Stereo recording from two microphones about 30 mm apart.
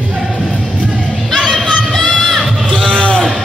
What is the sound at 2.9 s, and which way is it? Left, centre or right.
Sheep, left.